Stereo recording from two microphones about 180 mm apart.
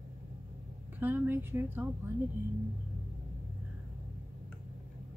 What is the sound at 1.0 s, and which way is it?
Speech, 10° right (ahead or behind).